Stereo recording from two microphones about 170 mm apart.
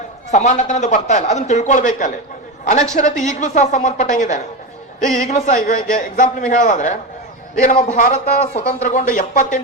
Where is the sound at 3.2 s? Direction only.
45° left (ahead or behind).